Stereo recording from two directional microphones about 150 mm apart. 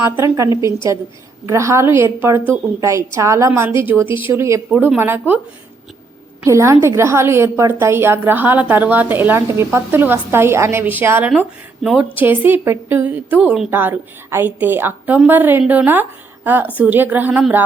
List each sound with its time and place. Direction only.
0.0 s a woman's voice: 20° right (ahead or behind)
6.4 s a woman's voice: 20° right (ahead or behind)